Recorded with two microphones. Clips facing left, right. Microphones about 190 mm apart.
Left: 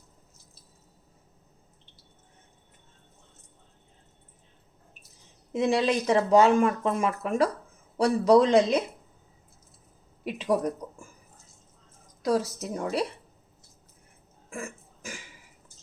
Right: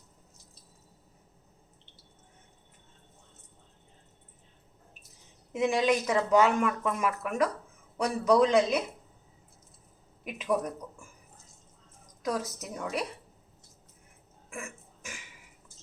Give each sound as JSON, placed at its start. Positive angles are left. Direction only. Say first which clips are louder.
{"t": 5.5, "sound": "a man's voice", "louder": "left 2 dB", "side_deg": 35}
{"t": 10.2, "sound": "a man's voice", "louder": "left 3 dB", "side_deg": 30}
{"t": 12.2, "sound": "a man's voice", "louder": "left 6 dB", "side_deg": 30}
{"t": 14.5, "sound": "burping", "louder": "left 4 dB", "side_deg": 35}